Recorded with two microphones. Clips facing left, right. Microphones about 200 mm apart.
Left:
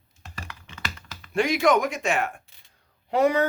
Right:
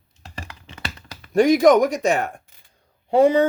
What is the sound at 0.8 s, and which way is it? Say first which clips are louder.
Speech: right 3 dB; 35° right (ahead or behind).